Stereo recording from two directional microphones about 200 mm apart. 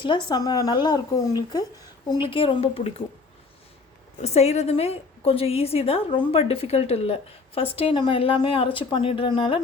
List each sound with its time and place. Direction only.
0.0 s a woman's voice: 25° left (ahead or behind)
4.2 s a woman's voice: 35° left (ahead or behind)